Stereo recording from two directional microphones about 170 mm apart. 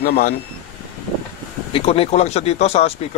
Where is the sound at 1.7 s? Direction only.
35° left (ahead or behind).